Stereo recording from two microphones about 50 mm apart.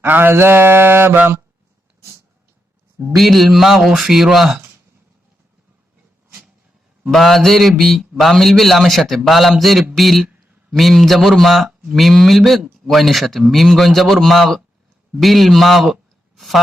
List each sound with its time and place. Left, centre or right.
0.1 s mantra: right
3.2 s a man's voice: centre
7.1 s a man's voice: centre